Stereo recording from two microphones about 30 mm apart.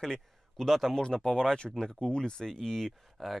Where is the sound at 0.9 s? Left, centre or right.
Left.